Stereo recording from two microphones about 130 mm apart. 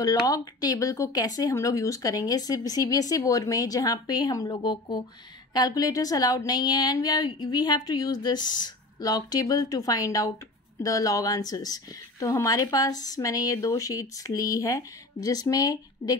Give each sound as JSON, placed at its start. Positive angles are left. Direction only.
{"t": 0.3, "sound": "speech", "side_deg": 30}